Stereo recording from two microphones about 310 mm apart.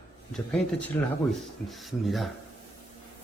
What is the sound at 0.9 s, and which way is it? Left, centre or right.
Speech, centre.